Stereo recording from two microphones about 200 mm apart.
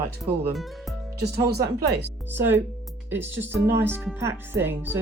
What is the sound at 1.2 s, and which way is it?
Speech, 55° right (ahead or behind).